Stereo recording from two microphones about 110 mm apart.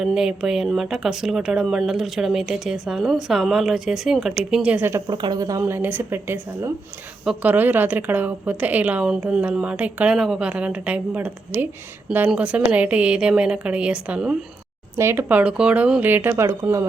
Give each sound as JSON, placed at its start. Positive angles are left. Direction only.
{"t": 0.0, "sound": "speech", "side_deg": -5}
{"t": 5.0, "sound": "a woman's voice", "side_deg": -45}
{"t": 14.9, "sound": "speech", "side_deg": -25}
{"t": 15.3, "sound": "a woman's voice", "side_deg": -10}